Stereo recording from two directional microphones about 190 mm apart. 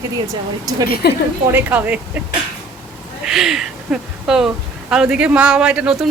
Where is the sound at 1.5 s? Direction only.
10° right (ahead or behind).